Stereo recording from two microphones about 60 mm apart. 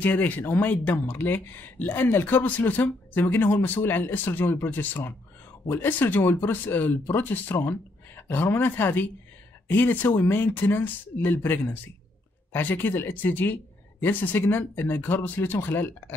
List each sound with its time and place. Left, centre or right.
0.0 s speech: left
5.7 s speech: left